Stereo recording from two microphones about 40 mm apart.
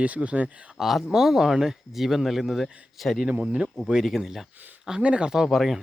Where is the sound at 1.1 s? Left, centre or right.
Centre.